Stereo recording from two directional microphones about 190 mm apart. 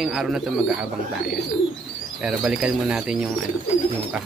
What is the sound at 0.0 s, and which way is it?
Speech, centre (ahead or behind).